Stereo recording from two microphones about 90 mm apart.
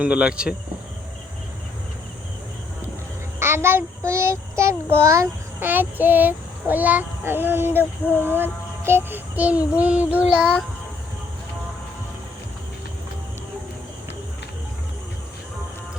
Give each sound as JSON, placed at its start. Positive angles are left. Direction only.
{"t": 0.0, "sound": "speech", "side_deg": -10}
{"t": 3.4, "sound": "child singing", "side_deg": -25}
{"t": 5.6, "sound": "child singing", "side_deg": -20}